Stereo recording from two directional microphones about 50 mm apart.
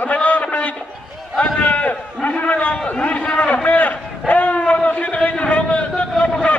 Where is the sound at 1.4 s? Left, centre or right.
Left.